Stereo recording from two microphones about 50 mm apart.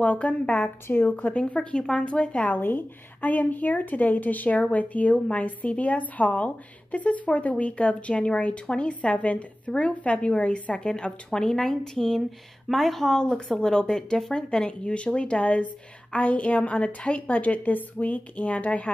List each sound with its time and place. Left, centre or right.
0.0 s a woman's voice: left
0.8 s speech: left
1.1 s a woman's voice: left
2.5 s a woman's voice: left